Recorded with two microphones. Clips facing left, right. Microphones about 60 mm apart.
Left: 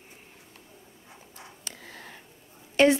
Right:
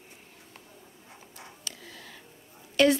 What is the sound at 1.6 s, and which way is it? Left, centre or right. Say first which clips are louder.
Whispering: left 2 dB; left.